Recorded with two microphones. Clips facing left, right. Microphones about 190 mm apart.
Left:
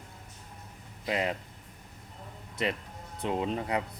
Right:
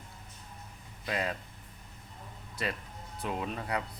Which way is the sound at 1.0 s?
20° left (ahead or behind).